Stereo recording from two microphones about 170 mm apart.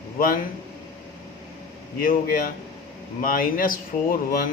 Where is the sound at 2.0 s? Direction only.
60° left (ahead or behind).